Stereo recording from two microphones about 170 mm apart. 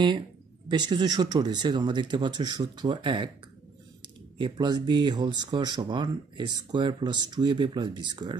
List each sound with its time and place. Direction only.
0.7 s speech: 25° right (ahead or behind)
4.4 s speech: 25° right (ahead or behind)